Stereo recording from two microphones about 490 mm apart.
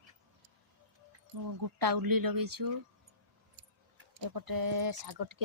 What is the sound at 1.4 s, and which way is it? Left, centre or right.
Speech, right.